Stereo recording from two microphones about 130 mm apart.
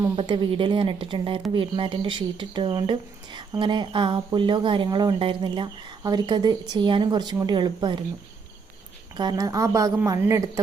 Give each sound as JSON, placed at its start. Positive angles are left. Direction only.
{"t": 0.2, "sound": "speech", "side_deg": -40}
{"t": 9.1, "sound": "a woman's voice", "side_deg": -30}